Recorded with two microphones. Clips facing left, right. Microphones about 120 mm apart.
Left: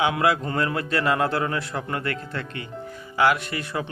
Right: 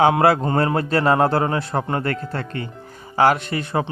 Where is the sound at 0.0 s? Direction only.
40° right (ahead or behind).